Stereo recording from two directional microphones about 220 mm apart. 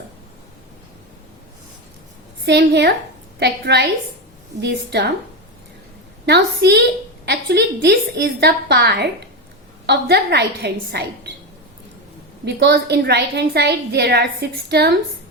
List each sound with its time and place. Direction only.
2.5 s a woman's voice: 45° right (ahead or behind)
6.2 s a woman's voice: 50° right (ahead or behind)
12.5 s a woman's voice: 50° right (ahead or behind)